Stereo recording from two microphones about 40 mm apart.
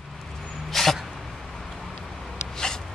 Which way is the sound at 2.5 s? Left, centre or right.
Centre.